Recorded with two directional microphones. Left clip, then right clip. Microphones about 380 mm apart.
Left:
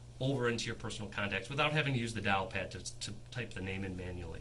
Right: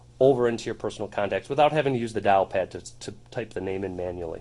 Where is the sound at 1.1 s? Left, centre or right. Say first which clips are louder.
Right 12 dB; right.